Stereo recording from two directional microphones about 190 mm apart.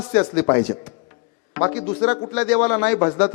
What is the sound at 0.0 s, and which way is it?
Speech, 10° left (ahead or behind).